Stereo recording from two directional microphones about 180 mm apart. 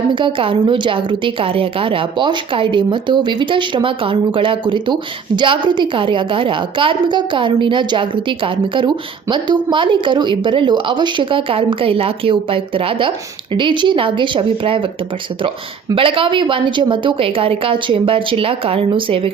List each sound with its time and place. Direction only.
0.1 s a woman's voice: 30° right (ahead or behind)